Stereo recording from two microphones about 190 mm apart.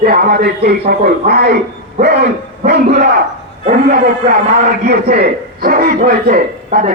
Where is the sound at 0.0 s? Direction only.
50° right (ahead or behind).